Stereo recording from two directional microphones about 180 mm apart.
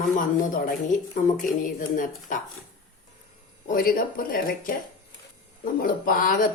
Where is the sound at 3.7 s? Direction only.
55° left (ahead or behind).